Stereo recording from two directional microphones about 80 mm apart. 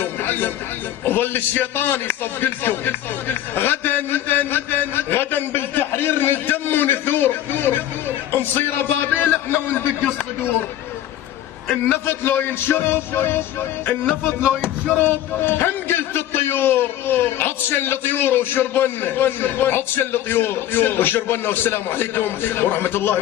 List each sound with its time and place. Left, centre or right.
0.0 s music: left
1.0 s a man's voice: left
12.0 s a man's voice: left